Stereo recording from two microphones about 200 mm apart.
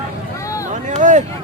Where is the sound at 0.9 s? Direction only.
35° right (ahead or behind).